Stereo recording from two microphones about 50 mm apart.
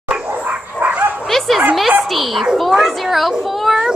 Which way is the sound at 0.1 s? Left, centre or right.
Right.